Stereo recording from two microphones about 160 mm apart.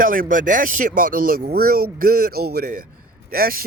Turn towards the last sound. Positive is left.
turn(degrees=-65)  # may be behind; listen again after turning